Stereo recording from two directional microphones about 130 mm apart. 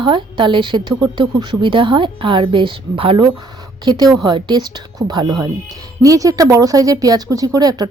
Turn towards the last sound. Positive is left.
turn(degrees=-30)  # may be behind; listen again after turning